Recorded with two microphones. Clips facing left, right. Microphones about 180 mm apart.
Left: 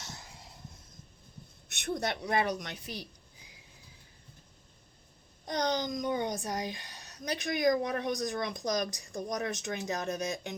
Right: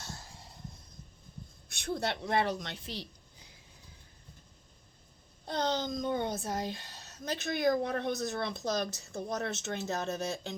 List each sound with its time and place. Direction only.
0.0 s a sound: 20° left (ahead or behind)
1.6 s speech: 20° left (ahead or behind)
5.5 s a child's voice: 15° left (ahead or behind)